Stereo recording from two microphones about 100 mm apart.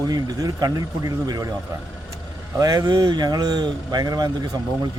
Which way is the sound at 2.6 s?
35° right (ahead or behind).